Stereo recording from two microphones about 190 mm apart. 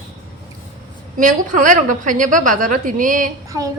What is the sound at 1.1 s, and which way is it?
A woman's voice, 40° right (ahead or behind).